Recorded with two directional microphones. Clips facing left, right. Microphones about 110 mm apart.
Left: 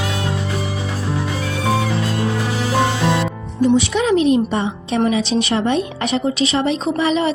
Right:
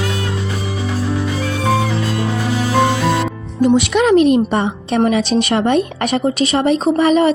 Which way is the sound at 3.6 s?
65° right (ahead or behind).